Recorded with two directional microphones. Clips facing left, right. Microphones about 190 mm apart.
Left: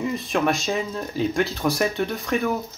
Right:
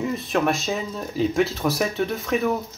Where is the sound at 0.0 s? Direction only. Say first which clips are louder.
Even; centre (ahead or behind).